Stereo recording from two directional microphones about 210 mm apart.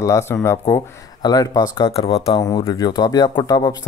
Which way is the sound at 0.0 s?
15° left (ahead or behind).